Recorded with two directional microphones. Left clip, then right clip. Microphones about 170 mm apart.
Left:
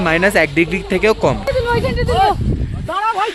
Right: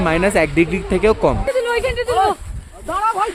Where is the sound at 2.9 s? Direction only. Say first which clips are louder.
Left 1 dB; 75° right (ahead or behind).